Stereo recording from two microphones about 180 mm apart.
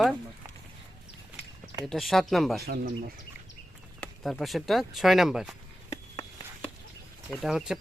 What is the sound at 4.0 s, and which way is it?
Speech, centre (ahead or behind).